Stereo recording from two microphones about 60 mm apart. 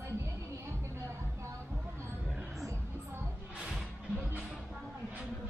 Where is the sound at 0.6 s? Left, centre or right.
Right.